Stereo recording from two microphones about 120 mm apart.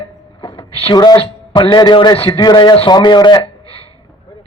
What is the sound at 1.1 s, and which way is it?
A man's voice, 50° left (ahead or behind).